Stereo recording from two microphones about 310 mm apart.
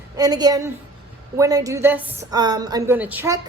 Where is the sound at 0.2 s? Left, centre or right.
Centre.